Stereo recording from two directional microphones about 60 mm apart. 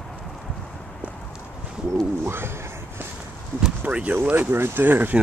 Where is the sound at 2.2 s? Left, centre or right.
Right.